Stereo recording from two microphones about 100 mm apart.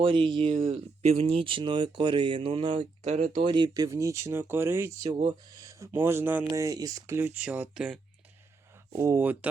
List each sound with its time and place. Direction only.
0.0 s speech: 55° right (ahead or behind)
3.8 s speech: 30° right (ahead or behind)
6.5 s speech: 35° right (ahead or behind)
7.2 s speech: 15° right (ahead or behind)
8.9 s speech: 30° right (ahead or behind)
9.2 s speech: 15° right (ahead or behind)